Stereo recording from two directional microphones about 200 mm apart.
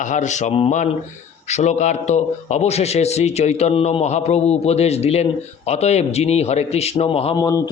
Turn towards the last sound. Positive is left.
turn(degrees=20)  # may be behind; listen again after turning